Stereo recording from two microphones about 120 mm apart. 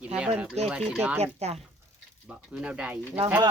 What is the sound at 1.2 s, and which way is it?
Speech, 65° right (ahead or behind).